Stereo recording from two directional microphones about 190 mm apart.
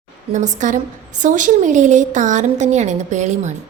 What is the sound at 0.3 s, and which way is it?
A woman's voice, 40° right (ahead or behind).